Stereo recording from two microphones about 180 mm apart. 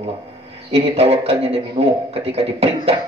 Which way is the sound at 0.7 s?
35° right (ahead or behind).